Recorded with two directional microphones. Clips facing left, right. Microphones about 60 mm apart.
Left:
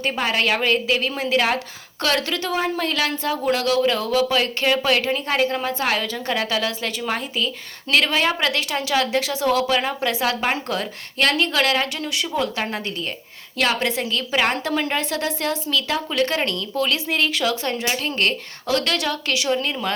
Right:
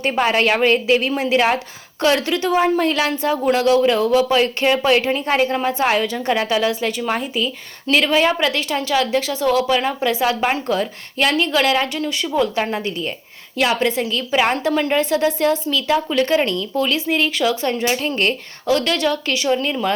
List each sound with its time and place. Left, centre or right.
0.0 s a woman's voice: right; by 19.9 s centre